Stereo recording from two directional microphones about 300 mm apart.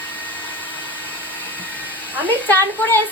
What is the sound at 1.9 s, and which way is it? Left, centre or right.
Hair dryer, centre.